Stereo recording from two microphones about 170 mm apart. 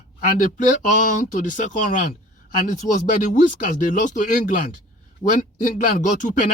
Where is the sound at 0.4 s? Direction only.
50° left (ahead or behind).